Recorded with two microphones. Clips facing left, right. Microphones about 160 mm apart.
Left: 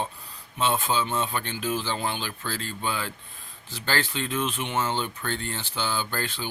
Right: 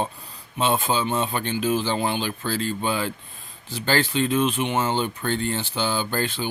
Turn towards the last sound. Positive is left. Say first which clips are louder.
# right 5 dB
turn(degrees=-20)  # may be behind; listen again after turning